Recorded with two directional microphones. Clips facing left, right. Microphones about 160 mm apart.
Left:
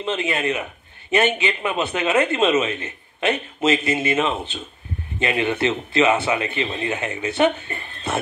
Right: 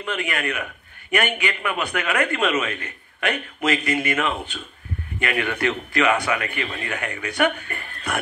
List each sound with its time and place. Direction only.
0.0 s a man's voice: 25° left (ahead or behind)